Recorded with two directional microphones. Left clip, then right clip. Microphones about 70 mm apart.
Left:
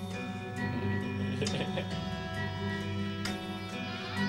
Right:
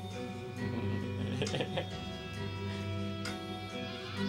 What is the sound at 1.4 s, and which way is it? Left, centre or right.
Music, left.